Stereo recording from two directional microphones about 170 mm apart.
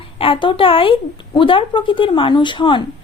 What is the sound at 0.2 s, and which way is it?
A woman's voice, 30° left (ahead or behind).